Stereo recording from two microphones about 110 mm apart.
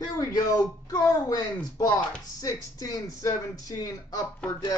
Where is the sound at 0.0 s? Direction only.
35° left (ahead or behind).